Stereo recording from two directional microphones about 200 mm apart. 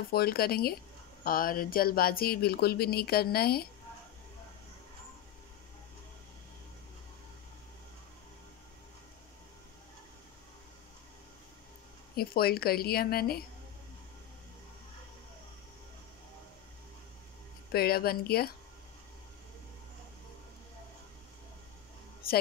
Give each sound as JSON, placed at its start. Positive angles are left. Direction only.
{"t": 0.1, "sound": "speech", "side_deg": 50}
{"t": 12.2, "sound": "speech", "side_deg": 50}
{"t": 17.7, "sound": "speech", "side_deg": 50}